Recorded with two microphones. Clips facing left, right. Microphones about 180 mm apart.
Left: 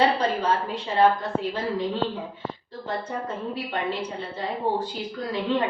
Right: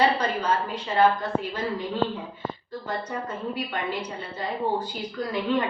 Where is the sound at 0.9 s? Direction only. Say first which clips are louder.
Left 1 dB; 30° left (ahead or behind).